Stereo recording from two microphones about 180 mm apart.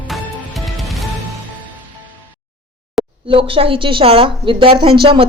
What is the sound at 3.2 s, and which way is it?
Speech, 30° right (ahead or behind).